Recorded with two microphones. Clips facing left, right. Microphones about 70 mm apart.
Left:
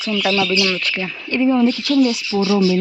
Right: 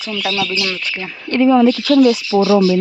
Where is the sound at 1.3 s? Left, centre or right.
Right.